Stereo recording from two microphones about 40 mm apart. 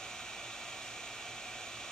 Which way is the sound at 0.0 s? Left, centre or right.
Centre.